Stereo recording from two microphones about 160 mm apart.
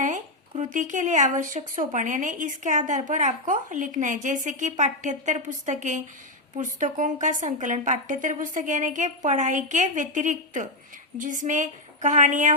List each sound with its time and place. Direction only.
0.0 s speech: 50° right (ahead or behind)